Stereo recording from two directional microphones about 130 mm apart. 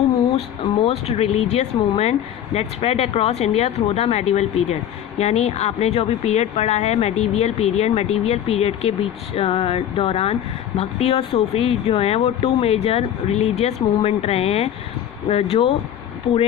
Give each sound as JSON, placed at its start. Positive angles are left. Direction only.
{"t": 0.2, "sound": "speech", "side_deg": 50}